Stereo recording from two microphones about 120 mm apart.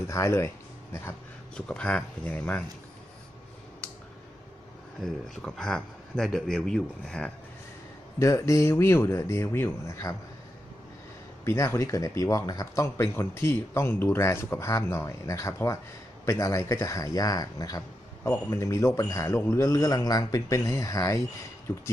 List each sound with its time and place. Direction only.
0.1 s speech: 25° left (ahead or behind)
1.5 s speech: 10° left (ahead or behind)
5.4 s speech: 5° left (ahead or behind)
8.2 s speech: 25° left (ahead or behind)
11.4 s speech: 25° left (ahead or behind)